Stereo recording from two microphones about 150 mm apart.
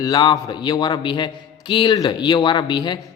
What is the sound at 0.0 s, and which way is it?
Speech, 25° left (ahead or behind).